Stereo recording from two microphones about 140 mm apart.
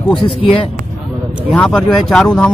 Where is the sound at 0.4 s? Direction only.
40° left (ahead or behind).